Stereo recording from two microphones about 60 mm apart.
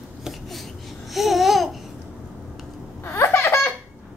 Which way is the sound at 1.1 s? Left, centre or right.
Centre.